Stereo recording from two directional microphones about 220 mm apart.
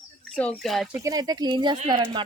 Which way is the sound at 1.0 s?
15° right (ahead or behind).